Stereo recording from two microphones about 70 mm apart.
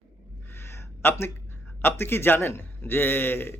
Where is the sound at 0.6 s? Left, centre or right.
Left.